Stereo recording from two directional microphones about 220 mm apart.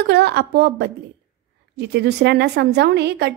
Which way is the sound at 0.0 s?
50° right (ahead or behind).